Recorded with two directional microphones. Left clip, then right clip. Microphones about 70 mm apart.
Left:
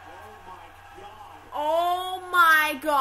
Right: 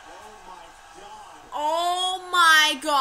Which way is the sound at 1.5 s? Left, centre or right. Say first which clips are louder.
Even; centre.